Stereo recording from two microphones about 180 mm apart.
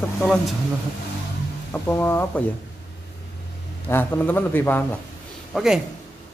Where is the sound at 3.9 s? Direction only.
10° left (ahead or behind).